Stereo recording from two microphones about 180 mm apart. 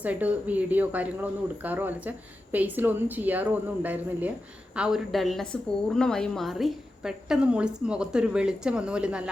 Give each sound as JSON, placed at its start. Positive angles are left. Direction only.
{"t": 0.0, "sound": "a woman's voice", "side_deg": -10}